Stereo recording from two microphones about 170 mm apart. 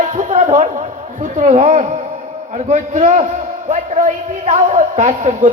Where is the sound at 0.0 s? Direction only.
45° right (ahead or behind).